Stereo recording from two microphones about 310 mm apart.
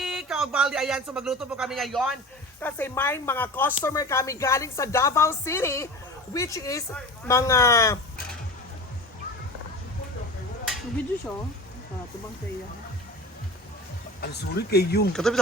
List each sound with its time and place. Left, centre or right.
0.0 s speech: centre
14.2 s speech: left
15.1 s speech: centre